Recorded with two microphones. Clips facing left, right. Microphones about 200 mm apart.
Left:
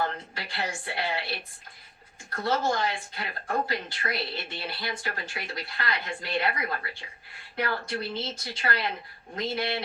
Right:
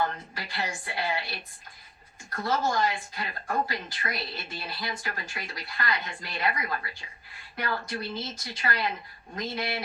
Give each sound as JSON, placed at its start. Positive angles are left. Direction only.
{"t": 0.0, "sound": "speech", "side_deg": 30}